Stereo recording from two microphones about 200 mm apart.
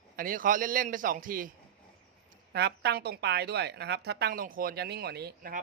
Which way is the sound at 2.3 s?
55° right (ahead or behind).